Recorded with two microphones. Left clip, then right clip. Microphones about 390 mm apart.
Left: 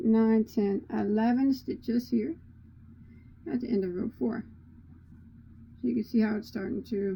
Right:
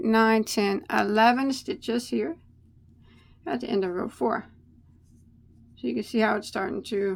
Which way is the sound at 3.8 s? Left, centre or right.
Right.